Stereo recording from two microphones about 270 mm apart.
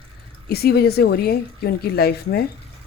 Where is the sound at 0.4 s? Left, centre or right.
Left.